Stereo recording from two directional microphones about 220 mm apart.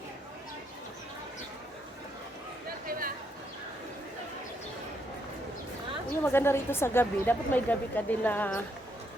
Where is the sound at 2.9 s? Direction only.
40° right (ahead or behind).